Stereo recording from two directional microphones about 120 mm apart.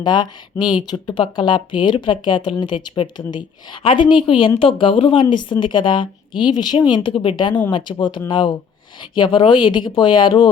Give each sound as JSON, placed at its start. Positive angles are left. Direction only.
{"t": 0.0, "sound": "speech", "side_deg": 35}
{"t": 0.5, "sound": "speech", "side_deg": 20}
{"t": 0.9, "sound": "speech", "side_deg": 40}